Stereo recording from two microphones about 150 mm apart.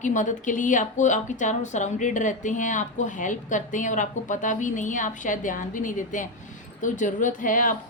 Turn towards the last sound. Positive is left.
turn(degrees=60)  # may be behind; listen again after turning